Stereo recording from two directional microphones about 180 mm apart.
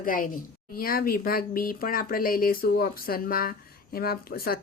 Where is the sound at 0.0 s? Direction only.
50° left (ahead or behind).